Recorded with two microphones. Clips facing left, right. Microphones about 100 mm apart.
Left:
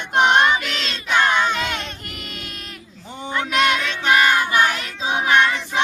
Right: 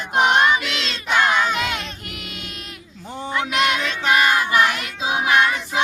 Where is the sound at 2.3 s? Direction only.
45° left (ahead or behind).